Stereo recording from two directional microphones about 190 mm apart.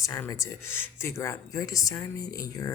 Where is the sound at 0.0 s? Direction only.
15° left (ahead or behind).